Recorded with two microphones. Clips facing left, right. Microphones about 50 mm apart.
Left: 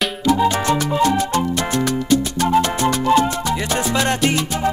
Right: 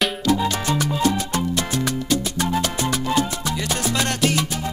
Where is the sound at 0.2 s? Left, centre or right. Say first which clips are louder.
Left 4 dB; centre.